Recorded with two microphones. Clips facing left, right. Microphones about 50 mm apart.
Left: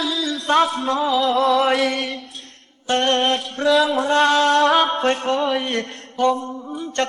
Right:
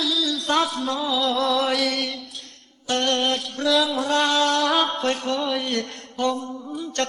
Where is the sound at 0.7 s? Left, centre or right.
Left.